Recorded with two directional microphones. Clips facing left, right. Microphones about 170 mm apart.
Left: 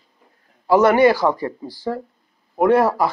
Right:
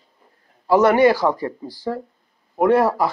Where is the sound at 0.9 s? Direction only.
35° right (ahead or behind).